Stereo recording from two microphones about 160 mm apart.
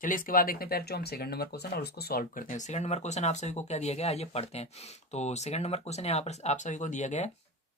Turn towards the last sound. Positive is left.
turn(degrees=45)  # may be behind; listen again after turning